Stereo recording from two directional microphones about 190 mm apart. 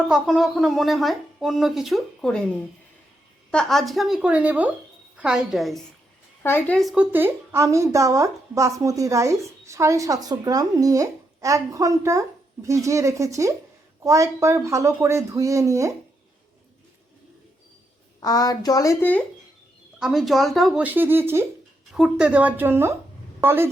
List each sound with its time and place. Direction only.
0.1 s a woman's voice: centre (ahead or behind)
18.2 s a woman's voice: 20° left (ahead or behind)
20.0 s a woman's voice: centre (ahead or behind)